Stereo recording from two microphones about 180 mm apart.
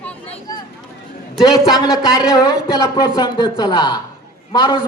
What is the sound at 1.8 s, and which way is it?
A man's voice, 20° left (ahead or behind).